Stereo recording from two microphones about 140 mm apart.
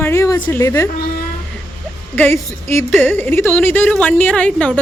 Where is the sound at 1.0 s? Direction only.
90° left.